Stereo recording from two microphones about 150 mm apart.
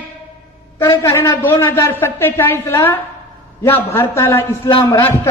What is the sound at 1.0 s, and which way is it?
A man's voice, 15° left (ahead or behind).